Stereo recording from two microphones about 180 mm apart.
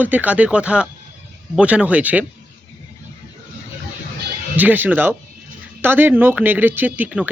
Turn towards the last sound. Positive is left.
turn(degrees=-5)  # may be behind; listen again after turning